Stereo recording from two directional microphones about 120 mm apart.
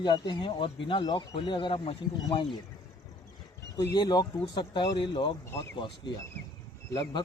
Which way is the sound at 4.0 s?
35° left (ahead or behind).